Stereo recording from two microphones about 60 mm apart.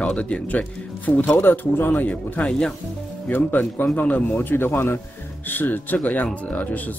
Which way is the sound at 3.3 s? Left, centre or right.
Left.